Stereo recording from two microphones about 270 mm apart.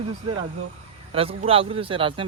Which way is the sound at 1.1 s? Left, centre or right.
Right.